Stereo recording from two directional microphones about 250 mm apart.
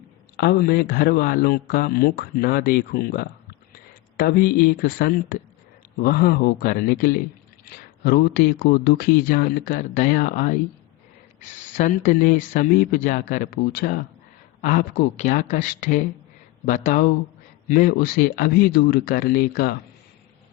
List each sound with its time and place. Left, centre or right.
0.3 s speech: left
11.8 s speech: left